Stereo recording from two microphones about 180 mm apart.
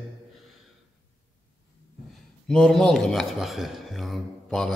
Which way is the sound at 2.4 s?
5° left (ahead or behind).